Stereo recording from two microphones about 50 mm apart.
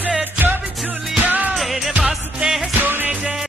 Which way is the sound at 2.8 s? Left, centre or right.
Right.